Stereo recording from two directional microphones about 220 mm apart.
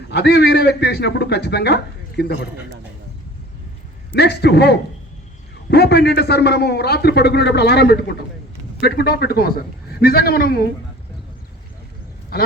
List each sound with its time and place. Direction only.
0.1 s a man's voice: 50° left (ahead or behind)
4.1 s a man's voice: 50° left (ahead or behind)
12.3 s a man's voice: 45° left (ahead or behind)